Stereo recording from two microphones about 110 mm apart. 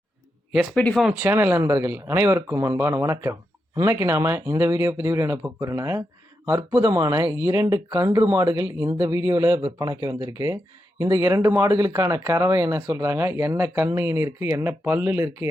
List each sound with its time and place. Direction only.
0.5 s speech: 5° right (ahead or behind)
0.8 s speech: 10° left (ahead or behind)
1.2 s speech: 20° right (ahead or behind)